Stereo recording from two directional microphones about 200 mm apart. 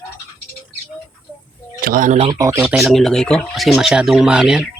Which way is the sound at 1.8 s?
45° right (ahead or behind).